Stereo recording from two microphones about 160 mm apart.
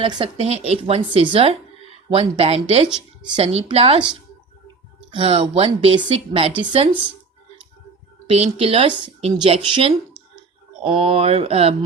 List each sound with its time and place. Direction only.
0.0 s speech: 30° right (ahead or behind)
8.3 s speech: 35° right (ahead or behind)